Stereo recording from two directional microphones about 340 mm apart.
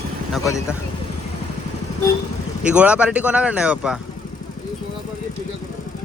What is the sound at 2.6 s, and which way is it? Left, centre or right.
Speech, centre.